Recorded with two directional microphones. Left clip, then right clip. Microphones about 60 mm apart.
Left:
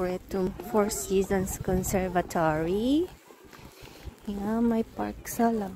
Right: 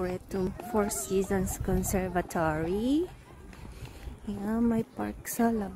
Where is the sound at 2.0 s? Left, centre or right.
Right.